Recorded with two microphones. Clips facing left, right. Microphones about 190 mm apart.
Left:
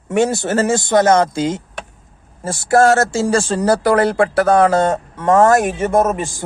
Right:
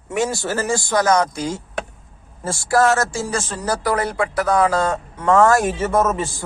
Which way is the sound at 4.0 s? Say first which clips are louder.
Left 7 dB; 75° left (ahead or behind).